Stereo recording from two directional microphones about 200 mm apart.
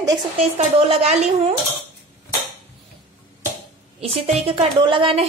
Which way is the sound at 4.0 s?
30° right (ahead or behind).